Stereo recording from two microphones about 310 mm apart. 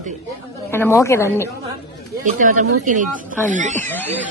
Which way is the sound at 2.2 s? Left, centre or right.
Right.